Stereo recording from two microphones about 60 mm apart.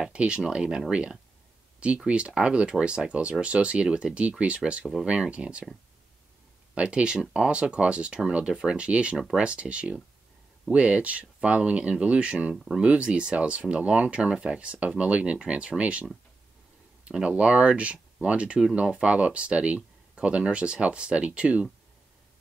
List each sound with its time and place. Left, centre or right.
0.1 s speech: centre
6.7 s speech: centre
9.1 s speech: centre
9.4 s speech: centre
12.5 s speech: centre
12.8 s speech: centre